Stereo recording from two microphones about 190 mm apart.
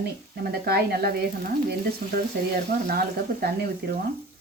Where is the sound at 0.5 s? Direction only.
55° right (ahead or behind).